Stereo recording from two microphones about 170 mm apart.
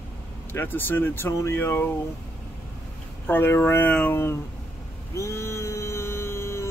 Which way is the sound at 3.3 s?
10° left (ahead or behind).